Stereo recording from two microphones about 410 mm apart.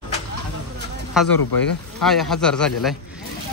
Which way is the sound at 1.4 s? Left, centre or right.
Left.